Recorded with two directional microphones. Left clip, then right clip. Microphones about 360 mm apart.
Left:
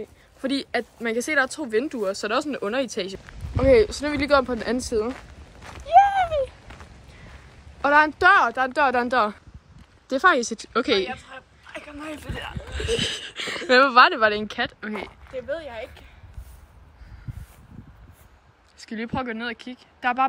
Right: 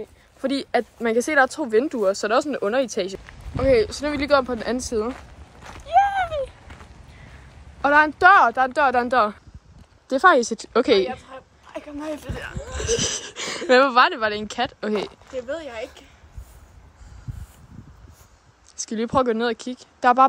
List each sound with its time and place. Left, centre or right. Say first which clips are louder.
0.0 s speech: right 3 dB; centre
3.5 s a sound: left 1 dB; centre
7.8 s speech: right 2 dB; centre
10.0 s speech: right 3 dB; centre
11.2 s a sound: right 1 dB; right
12.7 s wheeze: right 2 dB; right
13.7 s speech: even; centre
15.3 s speech: right 1 dB; right
18.8 s speech: right 8 dB; centre